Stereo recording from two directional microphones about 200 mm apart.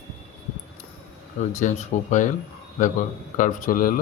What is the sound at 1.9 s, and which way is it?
Speech, 35° left (ahead or behind).